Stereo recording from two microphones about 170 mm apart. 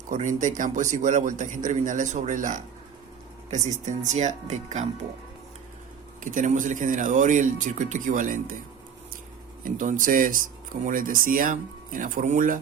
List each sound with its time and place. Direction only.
0.1 s speech: 45° right (ahead or behind)
6.2 s speech: 45° right (ahead or behind)
9.6 s speech: 50° right (ahead or behind)